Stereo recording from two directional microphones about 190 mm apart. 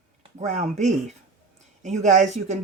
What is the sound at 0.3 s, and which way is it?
Speech, 40° right (ahead or behind).